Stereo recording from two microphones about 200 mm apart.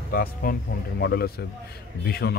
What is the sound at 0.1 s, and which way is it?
Speech, 45° left (ahead or behind).